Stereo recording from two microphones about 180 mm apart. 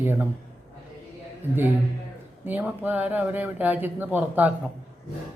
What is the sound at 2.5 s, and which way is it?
A man's voice, 10° right (ahead or behind).